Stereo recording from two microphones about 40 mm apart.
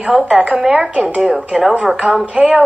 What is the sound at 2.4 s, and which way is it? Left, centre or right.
Speech, right.